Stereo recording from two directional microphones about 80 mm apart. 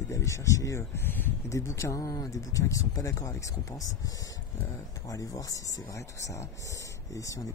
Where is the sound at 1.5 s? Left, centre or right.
Left.